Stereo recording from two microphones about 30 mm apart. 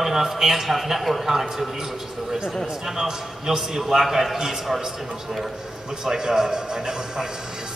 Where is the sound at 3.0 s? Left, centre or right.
Centre.